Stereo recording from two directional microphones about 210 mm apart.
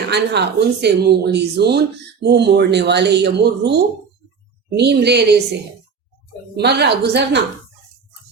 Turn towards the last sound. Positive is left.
turn(degrees=-50)  # may be behind; listen again after turning